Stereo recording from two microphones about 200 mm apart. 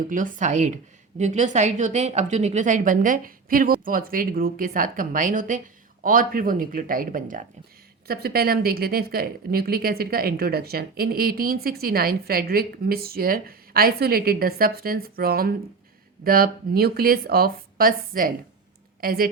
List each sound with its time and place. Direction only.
0.1 s a woman's voice: 40° right (ahead or behind)